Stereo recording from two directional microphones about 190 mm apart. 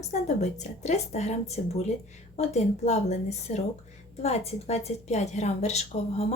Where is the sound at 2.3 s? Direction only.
35° left (ahead or behind).